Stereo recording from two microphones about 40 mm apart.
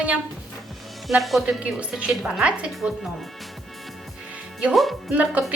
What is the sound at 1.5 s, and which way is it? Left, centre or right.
Speech, right.